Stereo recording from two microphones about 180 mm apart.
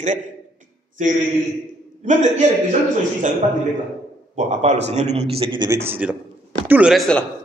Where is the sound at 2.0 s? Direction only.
40° right (ahead or behind).